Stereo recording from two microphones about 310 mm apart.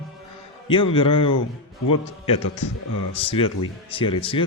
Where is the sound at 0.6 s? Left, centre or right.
Centre.